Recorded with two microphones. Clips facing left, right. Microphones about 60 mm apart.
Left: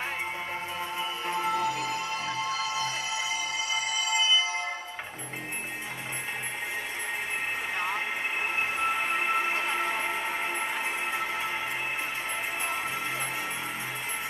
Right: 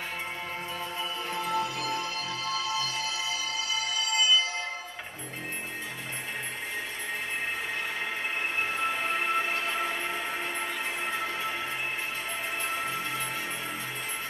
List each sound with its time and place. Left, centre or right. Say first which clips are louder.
0.9 s music: left 3 dB; left
8.7 s music: left 1 dB; centre